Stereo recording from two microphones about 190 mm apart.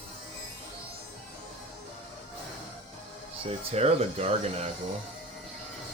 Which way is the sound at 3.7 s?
30° right (ahead or behind).